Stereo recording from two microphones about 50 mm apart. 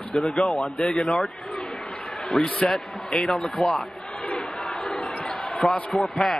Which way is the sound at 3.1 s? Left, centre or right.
Centre.